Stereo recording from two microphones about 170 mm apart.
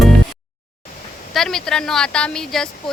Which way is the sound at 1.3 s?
Centre (ahead or behind).